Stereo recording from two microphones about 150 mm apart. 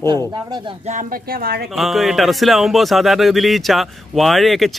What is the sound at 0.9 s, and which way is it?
Speech, 65° right (ahead or behind).